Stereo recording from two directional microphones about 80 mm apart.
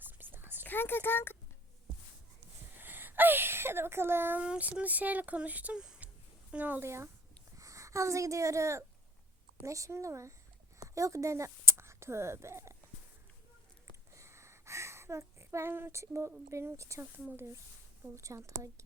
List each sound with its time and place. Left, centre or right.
0.1 s whispering: right
0.6 s speech: left
2.7 s a sound: right
4.4 s speech: centre
5.8 s a sound: centre
6.5 s speech: right
6.8 s speech: right
14.1 s a sound: right
16.5 s speech: right